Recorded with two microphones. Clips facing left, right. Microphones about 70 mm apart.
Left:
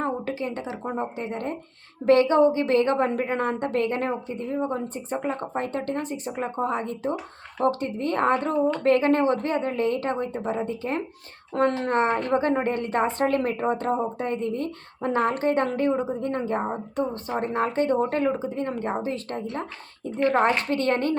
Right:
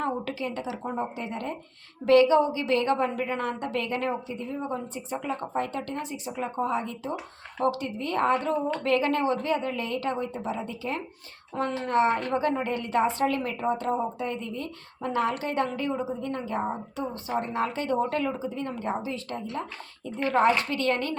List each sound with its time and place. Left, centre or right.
0.0 s a woman's voice: left
11.5 s speech: left
11.9 s a woman's voice: left